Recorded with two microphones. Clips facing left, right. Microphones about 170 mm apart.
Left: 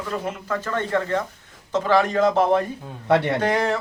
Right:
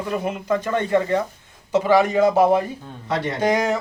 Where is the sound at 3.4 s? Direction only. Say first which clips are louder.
Right 2 dB; 15° right (ahead or behind).